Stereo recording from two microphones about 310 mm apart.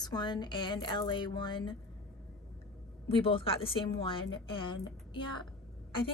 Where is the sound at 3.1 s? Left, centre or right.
Centre.